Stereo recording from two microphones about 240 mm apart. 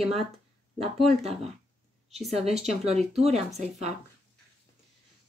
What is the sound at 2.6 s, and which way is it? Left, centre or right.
Speech, right.